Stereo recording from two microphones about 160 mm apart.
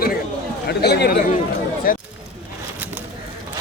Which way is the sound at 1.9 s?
60° left (ahead or behind).